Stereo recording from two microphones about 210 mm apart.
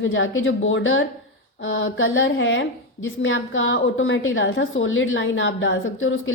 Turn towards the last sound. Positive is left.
turn(degrees=70)  # may be behind; listen again after turning